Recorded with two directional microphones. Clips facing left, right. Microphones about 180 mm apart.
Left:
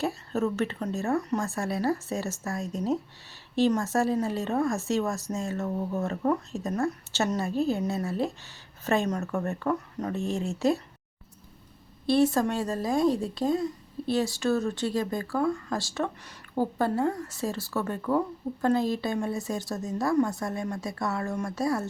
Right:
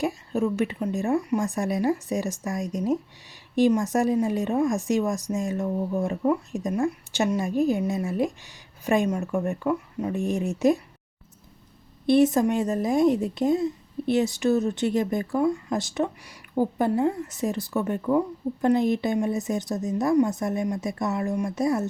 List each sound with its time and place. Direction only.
0.0 s speech: 15° right (ahead or behind)
12.0 s a woman's voice: 20° right (ahead or behind)